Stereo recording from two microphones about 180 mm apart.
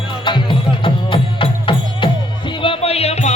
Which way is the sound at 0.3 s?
25° left (ahead or behind).